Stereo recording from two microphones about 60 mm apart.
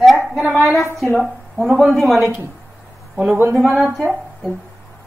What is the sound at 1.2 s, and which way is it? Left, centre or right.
Speech, centre.